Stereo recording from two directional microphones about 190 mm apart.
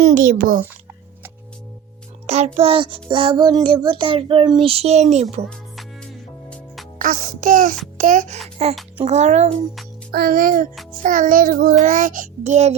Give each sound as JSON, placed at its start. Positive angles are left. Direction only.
{"t": 0.0, "sound": "child singing", "side_deg": -45}
{"t": 2.2, "sound": "a child's voice", "side_deg": -35}
{"t": 2.6, "sound": "child singing", "side_deg": -30}
{"t": 5.5, "sound": "music", "side_deg": 5}
{"t": 7.0, "sound": "child singing", "side_deg": -45}
{"t": 7.9, "sound": "a child's voice", "side_deg": -40}
{"t": 10.1, "sound": "child singing", "side_deg": -50}